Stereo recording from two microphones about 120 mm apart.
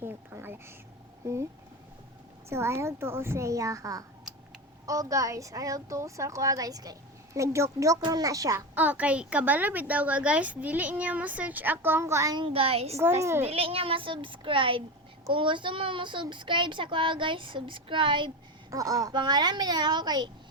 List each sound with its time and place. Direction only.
0.0 s a sound: 20° right (ahead or behind)
2.5 s a woman's voice: 20° right (ahead or behind)
8.7 s a woman's voice: 15° right (ahead or behind)
12.4 s a child's voice: 50° right (ahead or behind)
18.7 s speech: 30° right (ahead or behind)